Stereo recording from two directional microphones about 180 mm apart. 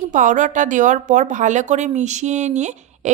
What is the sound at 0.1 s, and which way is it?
A woman's voice, 45° right (ahead or behind).